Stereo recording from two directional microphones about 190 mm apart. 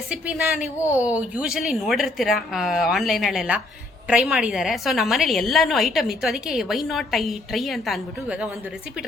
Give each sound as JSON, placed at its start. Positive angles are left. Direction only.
{"t": 0.9, "sound": "a woman's voice", "side_deg": -10}